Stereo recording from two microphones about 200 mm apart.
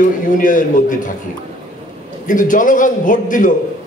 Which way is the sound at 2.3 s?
40° left (ahead or behind).